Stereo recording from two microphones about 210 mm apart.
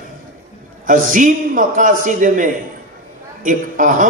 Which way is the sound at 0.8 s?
40° right (ahead or behind).